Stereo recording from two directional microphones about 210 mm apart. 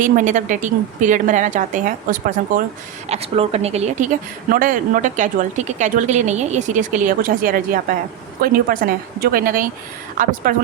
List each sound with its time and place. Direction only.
0.0 s speech: 40° right (ahead or behind)
3.1 s speech: 30° right (ahead or behind)